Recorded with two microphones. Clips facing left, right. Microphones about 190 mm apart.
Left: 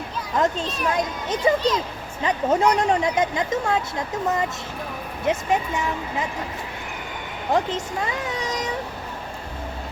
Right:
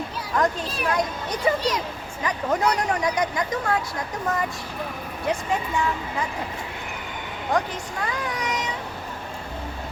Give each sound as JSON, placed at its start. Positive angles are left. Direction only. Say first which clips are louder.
{"t": 0.3, "sound": "speech", "louder": "left 1 dB", "side_deg": 25}
{"t": 7.5, "sound": "speech", "louder": "left 3 dB", "side_deg": 25}